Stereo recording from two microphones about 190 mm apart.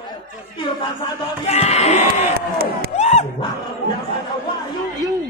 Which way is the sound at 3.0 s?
35° left (ahead or behind).